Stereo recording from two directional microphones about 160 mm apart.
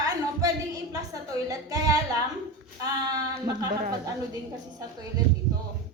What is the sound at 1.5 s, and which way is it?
A woman's voice, 20° right (ahead or behind).